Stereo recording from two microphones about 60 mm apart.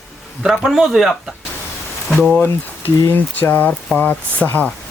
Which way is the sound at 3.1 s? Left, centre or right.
Left.